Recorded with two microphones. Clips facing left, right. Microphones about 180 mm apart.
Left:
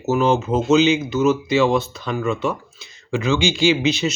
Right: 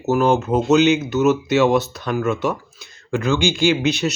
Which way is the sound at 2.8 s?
55° right (ahead or behind).